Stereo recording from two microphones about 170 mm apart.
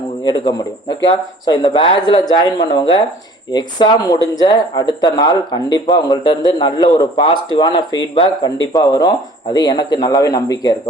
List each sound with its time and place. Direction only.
0.3 s speech: 25° left (ahead or behind)